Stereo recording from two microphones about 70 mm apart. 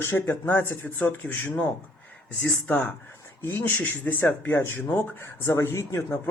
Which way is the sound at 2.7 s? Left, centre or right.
Left.